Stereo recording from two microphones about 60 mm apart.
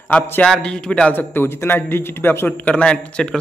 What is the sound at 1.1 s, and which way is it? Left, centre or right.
A man's voice, left.